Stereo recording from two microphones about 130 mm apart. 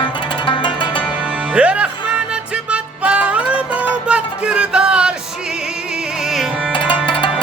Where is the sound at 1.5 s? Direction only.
10° right (ahead or behind).